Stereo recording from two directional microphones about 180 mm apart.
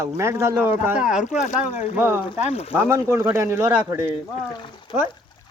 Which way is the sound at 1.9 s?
10° right (ahead or behind).